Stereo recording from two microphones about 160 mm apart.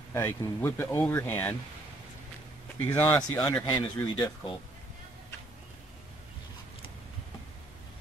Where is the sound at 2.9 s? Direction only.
10° left (ahead or behind).